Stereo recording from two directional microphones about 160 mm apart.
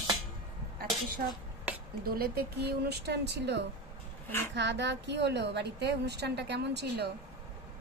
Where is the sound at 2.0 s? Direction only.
70° right (ahead or behind); by 7.1 s 90° right.